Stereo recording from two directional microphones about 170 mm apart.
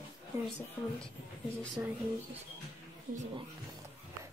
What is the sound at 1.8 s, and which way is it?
Speech, 10° right (ahead or behind).